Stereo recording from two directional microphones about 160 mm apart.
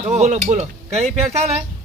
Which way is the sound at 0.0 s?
45° right (ahead or behind).